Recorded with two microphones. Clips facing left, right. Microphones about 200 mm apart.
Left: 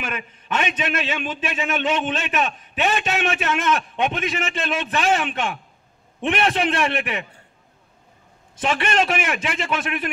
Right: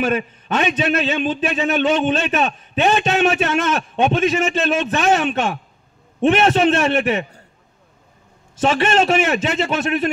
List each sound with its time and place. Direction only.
0.0 s a man's voice: 30° right (ahead or behind)
8.6 s a man's voice: 25° right (ahead or behind)